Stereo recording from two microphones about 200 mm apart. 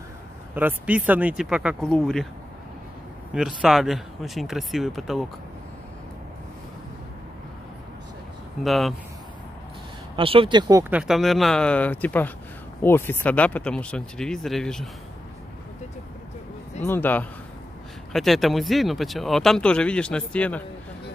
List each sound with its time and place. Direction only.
0.6 s speech: 10° right (ahead or behind)
3.3 s speech: centre (ahead or behind)
8.6 s speech: centre (ahead or behind)
10.1 s speech: 25° right (ahead or behind)
10.9 s speech: 5° right (ahead or behind)
16.8 s speech: 10° left (ahead or behind)